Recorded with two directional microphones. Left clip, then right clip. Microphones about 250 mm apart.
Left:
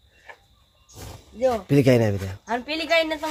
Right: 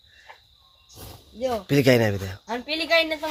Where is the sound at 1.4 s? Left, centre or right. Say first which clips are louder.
Left 2 dB; centre.